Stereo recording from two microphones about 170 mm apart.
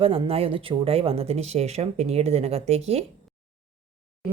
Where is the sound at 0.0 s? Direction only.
35° right (ahead or behind).